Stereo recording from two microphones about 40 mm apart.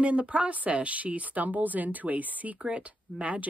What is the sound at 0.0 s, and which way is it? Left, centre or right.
Speech, right.